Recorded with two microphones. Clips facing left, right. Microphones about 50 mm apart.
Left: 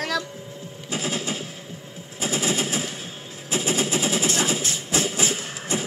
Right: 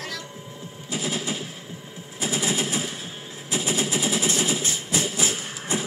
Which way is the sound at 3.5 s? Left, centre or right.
Left.